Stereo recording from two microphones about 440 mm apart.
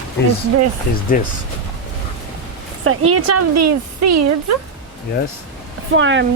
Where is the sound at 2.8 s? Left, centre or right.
Right.